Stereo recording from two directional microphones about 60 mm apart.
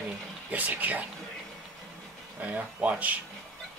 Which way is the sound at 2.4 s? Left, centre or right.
Right.